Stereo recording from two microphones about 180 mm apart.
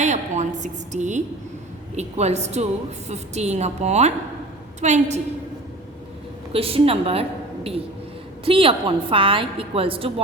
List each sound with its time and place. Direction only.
0.0 s a woman's voice: 40° right (ahead or behind)
6.5 s a woman's voice: 30° right (ahead or behind)